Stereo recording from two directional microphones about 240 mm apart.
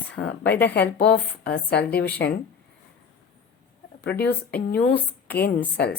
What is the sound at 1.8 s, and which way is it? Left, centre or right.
Speech, centre.